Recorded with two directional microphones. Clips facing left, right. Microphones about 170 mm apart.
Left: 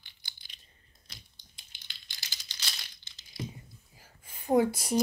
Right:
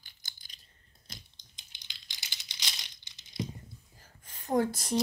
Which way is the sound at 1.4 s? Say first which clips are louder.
Even; 20° right (ahead or behind).